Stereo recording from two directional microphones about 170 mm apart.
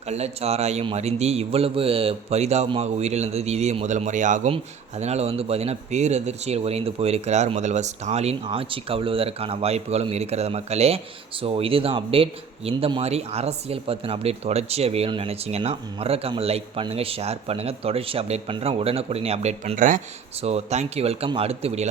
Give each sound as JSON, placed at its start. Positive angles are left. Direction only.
{"t": 0.1, "sound": "speech", "side_deg": -40}
{"t": 20.4, "sound": "speech", "side_deg": -40}